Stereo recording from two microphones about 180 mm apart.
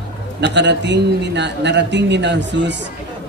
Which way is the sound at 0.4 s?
75° right (ahead or behind).